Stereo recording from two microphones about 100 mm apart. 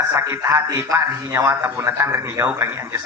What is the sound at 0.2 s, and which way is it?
A man's voice, 30° right (ahead or behind).